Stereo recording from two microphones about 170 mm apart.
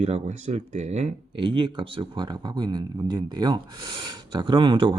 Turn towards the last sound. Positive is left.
turn(degrees=-30)  # may be behind; listen again after turning